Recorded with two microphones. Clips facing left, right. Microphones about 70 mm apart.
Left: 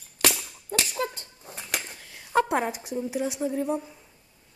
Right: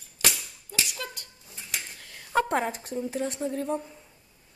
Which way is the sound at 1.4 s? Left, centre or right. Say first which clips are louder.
Left 5 dB; left.